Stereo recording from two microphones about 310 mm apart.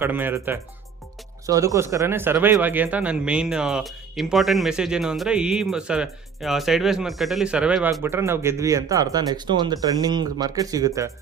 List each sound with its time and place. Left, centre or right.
0.0 s speech: centre